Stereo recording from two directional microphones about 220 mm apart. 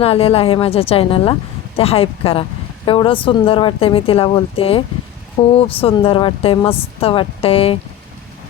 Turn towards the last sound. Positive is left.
turn(degrees=25)  # may be behind; listen again after turning